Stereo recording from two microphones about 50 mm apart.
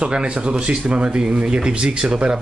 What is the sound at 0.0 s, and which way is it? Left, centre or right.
Speech, centre.